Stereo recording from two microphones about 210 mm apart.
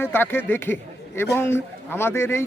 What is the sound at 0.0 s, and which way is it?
Speech, 10° left (ahead or behind).